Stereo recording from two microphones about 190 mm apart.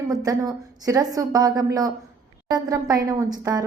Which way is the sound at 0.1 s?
20° right (ahead or behind).